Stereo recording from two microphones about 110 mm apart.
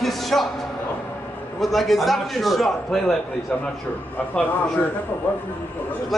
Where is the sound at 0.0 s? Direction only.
Centre (ahead or behind).